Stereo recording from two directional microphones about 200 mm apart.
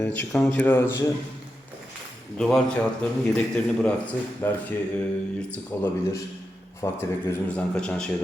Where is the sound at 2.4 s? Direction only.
5° left (ahead or behind).